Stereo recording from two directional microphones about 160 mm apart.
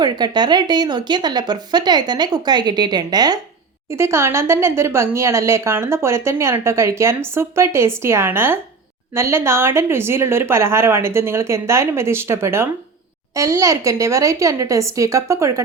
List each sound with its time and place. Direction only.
0.0 s speech: 25° right (ahead or behind)